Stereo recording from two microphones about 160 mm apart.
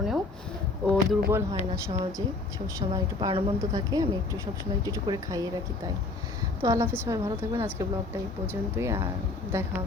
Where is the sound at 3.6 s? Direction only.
20° right (ahead or behind).